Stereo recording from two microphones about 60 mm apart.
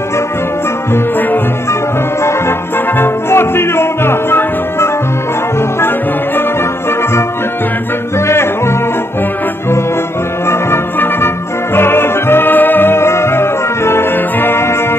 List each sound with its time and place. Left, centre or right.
3.0 s music: left
8.3 s music: left
10.4 s music: left